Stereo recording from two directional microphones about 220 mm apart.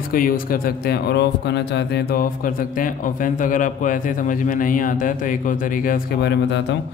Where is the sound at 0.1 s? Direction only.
40° left (ahead or behind).